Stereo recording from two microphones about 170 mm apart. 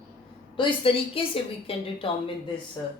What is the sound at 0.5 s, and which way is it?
A woman's voice, 30° left (ahead or behind).